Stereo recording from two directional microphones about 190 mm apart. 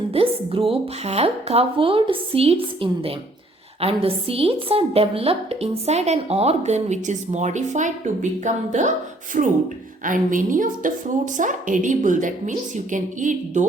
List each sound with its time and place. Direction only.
0.1 s a woman's voice: 30° right (ahead or behind)